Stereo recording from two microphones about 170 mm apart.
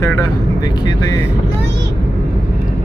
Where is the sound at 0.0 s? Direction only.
15° left (ahead or behind).